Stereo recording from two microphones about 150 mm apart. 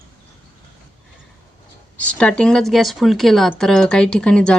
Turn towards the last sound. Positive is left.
turn(degrees=5)  # may be behind; listen again after turning